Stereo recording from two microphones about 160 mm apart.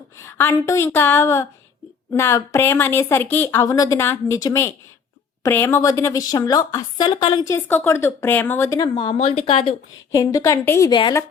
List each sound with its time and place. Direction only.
0.2 s speech: 15° left (ahead or behind); by 7.3 s 30° left (ahead or behind)
7.4 s speech: 15° left (ahead or behind)
9.0 s speech: 35° left (ahead or behind); by 10.9 s 20° left (ahead or behind)